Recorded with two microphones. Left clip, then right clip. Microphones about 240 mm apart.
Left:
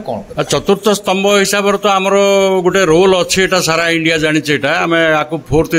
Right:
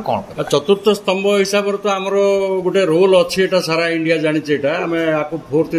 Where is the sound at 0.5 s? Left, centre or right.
Left.